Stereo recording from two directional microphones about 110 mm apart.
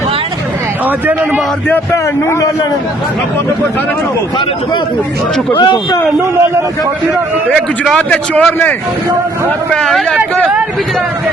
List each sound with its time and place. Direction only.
0.9 s a man's voice: 15° right (ahead or behind)
1.6 s a man's voice: 15° left (ahead or behind)
5.5 s speech: 45° left (ahead or behind)
7.5 s a man's voice: 5° left (ahead or behind)
9.7 s speech: 5° left (ahead or behind)
10.2 s a man's voice: 15° right (ahead or behind)